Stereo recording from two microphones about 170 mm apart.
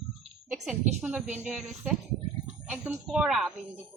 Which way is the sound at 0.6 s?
5° right (ahead or behind).